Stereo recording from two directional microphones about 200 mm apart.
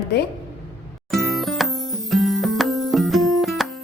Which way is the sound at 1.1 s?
Centre (ahead or behind).